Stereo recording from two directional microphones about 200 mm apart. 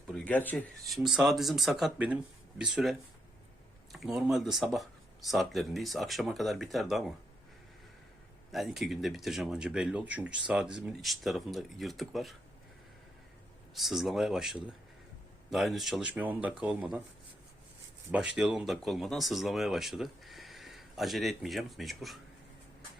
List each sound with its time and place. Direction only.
0.1 s speech: 10° left (ahead or behind)
3.9 s speech: centre (ahead or behind)
8.5 s speech: centre (ahead or behind)
13.7 s speech: centre (ahead or behind)
18.3 s speech: 5° right (ahead or behind)